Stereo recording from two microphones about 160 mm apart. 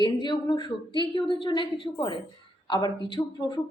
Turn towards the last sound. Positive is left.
turn(degrees=25)  # may be behind; listen again after turning